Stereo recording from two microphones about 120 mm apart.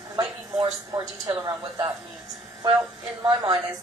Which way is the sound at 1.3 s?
25° right (ahead or behind).